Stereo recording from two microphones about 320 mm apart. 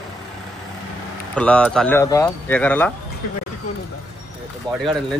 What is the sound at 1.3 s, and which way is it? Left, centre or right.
Speech, centre.